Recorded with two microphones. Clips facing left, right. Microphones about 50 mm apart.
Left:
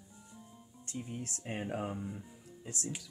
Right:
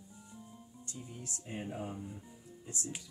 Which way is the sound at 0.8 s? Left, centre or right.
Left.